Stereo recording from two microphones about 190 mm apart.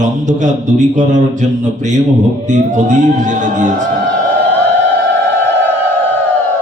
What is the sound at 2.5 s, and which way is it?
Mantra, 40° right (ahead or behind).